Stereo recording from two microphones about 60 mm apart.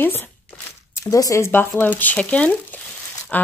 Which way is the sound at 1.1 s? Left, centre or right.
Left.